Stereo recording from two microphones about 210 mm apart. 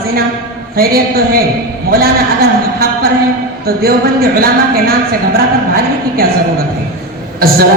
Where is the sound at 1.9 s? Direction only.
45° right (ahead or behind).